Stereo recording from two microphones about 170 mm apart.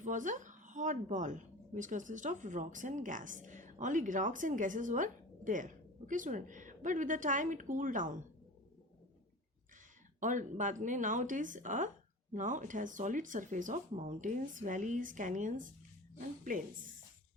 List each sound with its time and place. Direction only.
0.0 s a woman's voice: 50° right (ahead or behind)
10.2 s a woman's voice: 50° right (ahead or behind)